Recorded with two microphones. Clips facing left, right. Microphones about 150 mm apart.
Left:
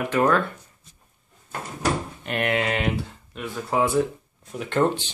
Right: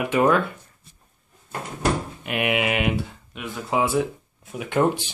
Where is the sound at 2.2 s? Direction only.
10° right (ahead or behind).